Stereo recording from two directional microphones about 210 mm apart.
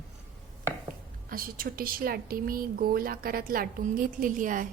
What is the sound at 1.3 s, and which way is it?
A woman's voice, 45° right (ahead or behind).